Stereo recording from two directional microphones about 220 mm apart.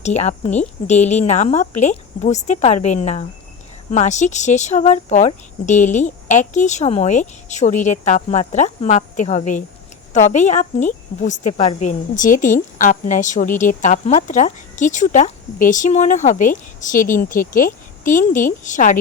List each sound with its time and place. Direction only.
0.0 s a woman's voice: 30° left (ahead or behind)